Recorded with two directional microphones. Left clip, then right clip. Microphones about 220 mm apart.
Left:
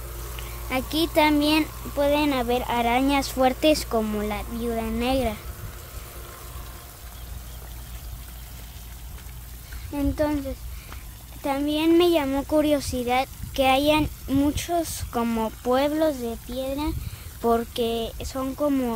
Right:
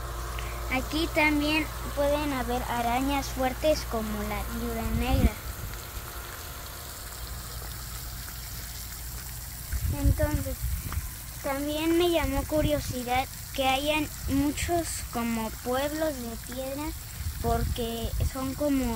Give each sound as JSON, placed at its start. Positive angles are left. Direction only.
{"t": 0.7, "sound": "speech", "side_deg": 45}
{"t": 9.9, "sound": "a sound", "side_deg": 60}
{"t": 11.4, "sound": "speech", "side_deg": 55}